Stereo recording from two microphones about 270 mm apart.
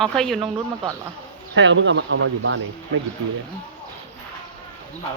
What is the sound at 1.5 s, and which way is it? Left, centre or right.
Speech, right.